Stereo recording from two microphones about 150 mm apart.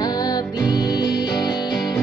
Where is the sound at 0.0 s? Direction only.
25° left (ahead or behind).